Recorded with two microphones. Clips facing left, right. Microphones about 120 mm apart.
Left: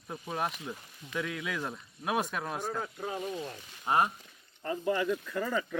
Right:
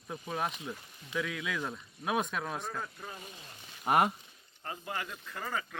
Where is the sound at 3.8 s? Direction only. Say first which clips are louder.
Right 1 dB; 75° right (ahead or behind).